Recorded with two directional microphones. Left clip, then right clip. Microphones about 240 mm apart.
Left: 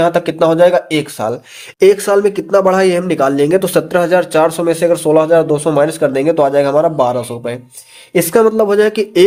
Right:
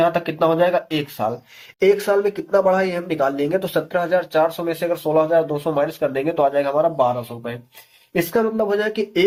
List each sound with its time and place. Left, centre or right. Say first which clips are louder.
0.0 s speech: left 6 dB; left